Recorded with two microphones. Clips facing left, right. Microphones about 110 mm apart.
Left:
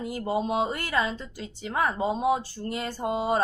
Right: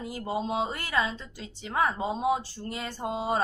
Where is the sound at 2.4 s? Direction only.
55° left (ahead or behind).